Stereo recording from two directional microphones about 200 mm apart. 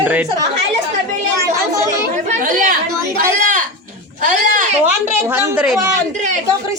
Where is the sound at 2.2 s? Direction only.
40° right (ahead or behind).